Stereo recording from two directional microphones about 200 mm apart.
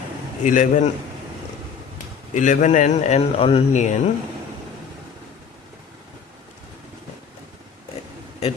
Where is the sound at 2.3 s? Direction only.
40° left (ahead or behind).